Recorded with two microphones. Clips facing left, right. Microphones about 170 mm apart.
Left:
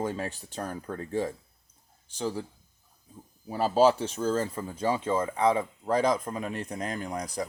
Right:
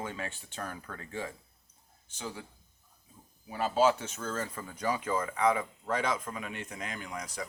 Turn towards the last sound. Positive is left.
turn(degrees=35)  # may be behind; listen again after turning